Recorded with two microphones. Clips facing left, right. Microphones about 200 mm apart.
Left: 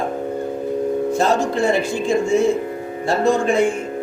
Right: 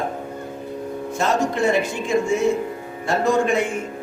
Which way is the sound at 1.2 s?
35° left (ahead or behind).